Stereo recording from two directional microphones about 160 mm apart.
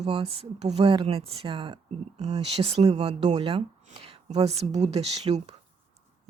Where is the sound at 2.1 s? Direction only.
45° right (ahead or behind).